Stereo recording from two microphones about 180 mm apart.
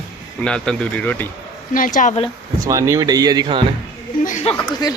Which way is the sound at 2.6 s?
15° right (ahead or behind).